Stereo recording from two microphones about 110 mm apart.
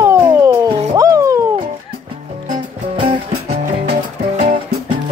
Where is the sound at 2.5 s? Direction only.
70° right (ahead or behind).